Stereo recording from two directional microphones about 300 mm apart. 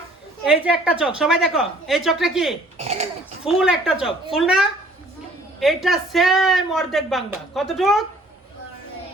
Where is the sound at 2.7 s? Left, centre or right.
Right.